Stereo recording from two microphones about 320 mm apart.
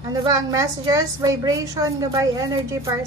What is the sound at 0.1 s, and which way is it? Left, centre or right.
A woman's voice, centre.